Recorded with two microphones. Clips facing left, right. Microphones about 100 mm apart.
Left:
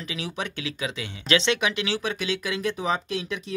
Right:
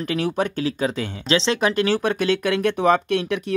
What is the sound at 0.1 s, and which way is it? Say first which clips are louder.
Speech: right 10 dB; 50° right (ahead or behind).